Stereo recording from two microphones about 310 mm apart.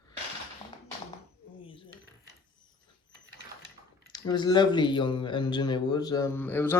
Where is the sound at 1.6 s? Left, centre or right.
Centre.